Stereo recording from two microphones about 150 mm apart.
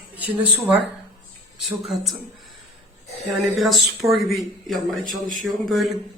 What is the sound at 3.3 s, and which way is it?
Speech, centre (ahead or behind).